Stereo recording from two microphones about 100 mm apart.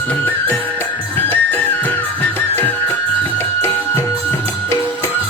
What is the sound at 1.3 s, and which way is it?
Music, 20° left (ahead or behind).